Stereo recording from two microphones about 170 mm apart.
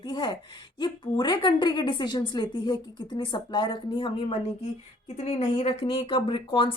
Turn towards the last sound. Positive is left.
turn(degrees=30)  # may be behind; listen again after turning